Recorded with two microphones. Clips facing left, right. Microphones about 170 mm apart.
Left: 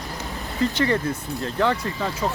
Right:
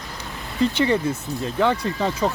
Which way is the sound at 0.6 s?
20° right (ahead or behind).